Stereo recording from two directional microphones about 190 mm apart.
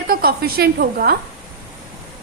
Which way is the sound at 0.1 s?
50° right (ahead or behind).